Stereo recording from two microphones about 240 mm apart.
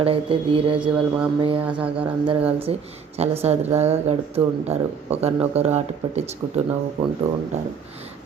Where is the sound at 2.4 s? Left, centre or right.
Right.